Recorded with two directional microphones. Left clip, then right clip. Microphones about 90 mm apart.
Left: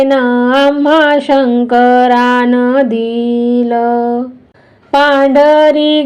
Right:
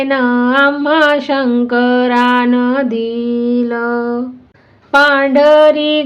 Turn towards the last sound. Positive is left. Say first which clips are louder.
# left 1 dB
turn(degrees=20)  # may be behind; listen again after turning